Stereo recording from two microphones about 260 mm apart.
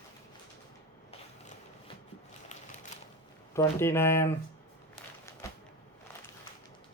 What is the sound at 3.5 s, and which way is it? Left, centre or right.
Speech, centre.